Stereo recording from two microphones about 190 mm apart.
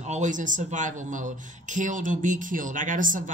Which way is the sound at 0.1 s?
40° right (ahead or behind).